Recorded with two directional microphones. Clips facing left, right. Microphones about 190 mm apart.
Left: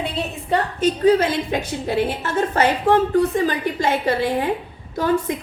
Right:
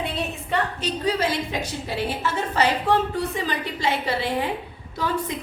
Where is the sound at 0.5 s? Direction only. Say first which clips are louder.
Left 7 dB; 50° left (ahead or behind).